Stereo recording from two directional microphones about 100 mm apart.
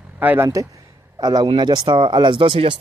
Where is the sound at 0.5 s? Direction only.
35° right (ahead or behind).